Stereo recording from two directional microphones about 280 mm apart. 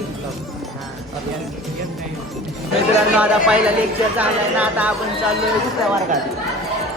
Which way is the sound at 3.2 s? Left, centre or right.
Centre.